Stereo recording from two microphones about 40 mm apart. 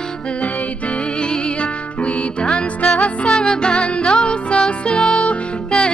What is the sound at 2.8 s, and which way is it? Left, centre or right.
Music, left.